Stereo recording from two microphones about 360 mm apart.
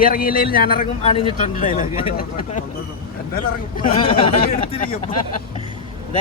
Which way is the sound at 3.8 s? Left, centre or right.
Centre.